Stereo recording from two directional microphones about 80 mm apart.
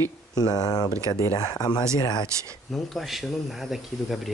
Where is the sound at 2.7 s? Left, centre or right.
Centre.